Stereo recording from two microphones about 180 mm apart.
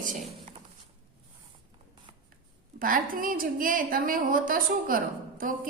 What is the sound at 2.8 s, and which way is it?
A woman's voice, 50° right (ahead or behind).